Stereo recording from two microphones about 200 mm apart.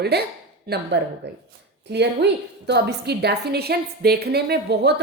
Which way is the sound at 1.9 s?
60° right (ahead or behind).